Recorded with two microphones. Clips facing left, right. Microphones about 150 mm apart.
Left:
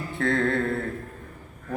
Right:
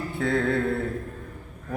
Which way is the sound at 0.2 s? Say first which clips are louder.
Even; 5° right (ahead or behind).